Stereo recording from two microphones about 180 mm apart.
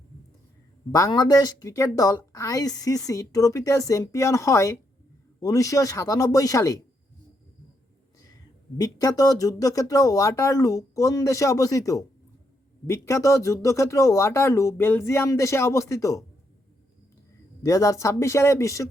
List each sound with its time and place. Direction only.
0.9 s a woman's voice: 20° left (ahead or behind)
8.8 s a woman's voice: 20° left (ahead or behind)
17.6 s speech: 15° left (ahead or behind)